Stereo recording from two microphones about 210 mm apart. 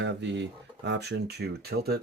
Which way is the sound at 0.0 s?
55° right (ahead or behind).